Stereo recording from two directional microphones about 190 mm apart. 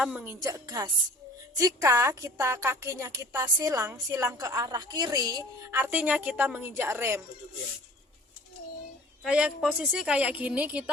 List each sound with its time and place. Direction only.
0.0 s a woman's voice: 5° right (ahead or behind)
0.3 s music: 20° right (ahead or behind)
1.5 s a woman's voice: 15° right (ahead or behind)
9.2 s a woman's voice: 5° right (ahead or behind)